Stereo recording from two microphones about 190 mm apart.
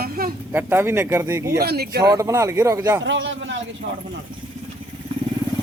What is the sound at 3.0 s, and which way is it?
Speech, 75° right (ahead or behind).